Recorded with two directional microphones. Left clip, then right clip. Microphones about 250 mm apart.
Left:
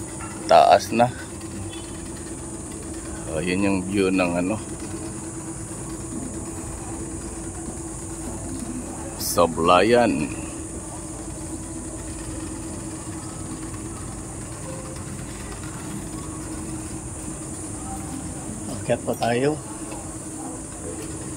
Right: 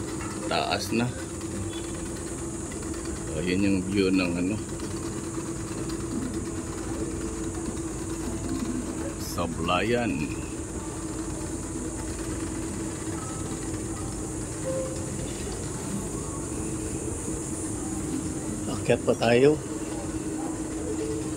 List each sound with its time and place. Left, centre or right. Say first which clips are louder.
0.5 s speech: left 14 dB; centre
3.3 s speech: left 3 dB; centre
9.3 s speech: left 11 dB; left
18.9 s speech: right 1 dB; centre